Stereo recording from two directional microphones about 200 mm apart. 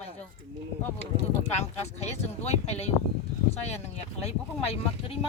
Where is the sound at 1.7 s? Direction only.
35° left (ahead or behind).